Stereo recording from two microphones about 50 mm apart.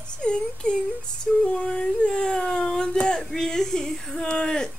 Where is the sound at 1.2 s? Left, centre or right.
Centre.